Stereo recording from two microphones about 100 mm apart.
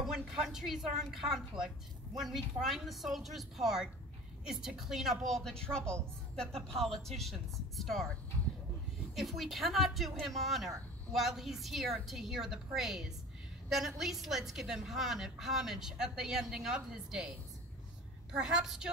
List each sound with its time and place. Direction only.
0.0 s a woman's voice: 5° right (ahead or behind)
9.1 s a woman's voice: centre (ahead or behind)
18.3 s a woman's voice: 5° right (ahead or behind)